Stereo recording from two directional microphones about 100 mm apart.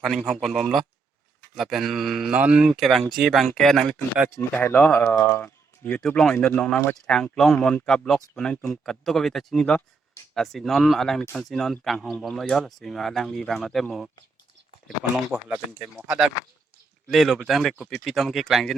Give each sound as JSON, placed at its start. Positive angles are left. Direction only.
{"t": 0.0, "sound": "speech", "side_deg": 0}
{"t": 4.5, "sound": "speech", "side_deg": 20}
{"t": 15.1, "sound": "speech", "side_deg": -10}